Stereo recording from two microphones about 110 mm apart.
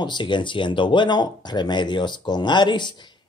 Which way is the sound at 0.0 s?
45° left (ahead or behind).